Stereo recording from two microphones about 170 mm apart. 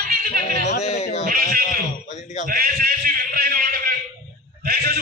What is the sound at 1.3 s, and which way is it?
Bleat, 55° right (ahead or behind).